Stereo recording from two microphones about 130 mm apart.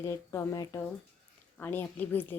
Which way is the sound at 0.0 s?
20° left (ahead or behind).